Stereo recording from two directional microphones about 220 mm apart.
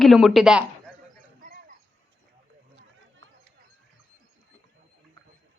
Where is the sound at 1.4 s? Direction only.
40° right (ahead or behind).